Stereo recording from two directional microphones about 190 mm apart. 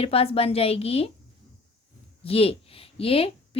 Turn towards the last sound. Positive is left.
turn(degrees=30)  # may be behind; listen again after turning